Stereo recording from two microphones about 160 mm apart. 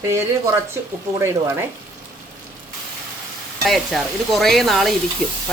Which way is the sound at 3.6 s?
Centre (ahead or behind).